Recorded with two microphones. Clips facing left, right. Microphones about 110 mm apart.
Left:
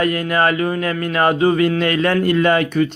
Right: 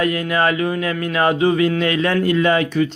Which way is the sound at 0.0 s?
45° left (ahead or behind).